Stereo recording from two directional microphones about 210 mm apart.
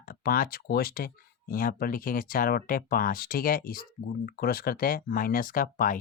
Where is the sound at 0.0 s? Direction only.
45° left (ahead or behind).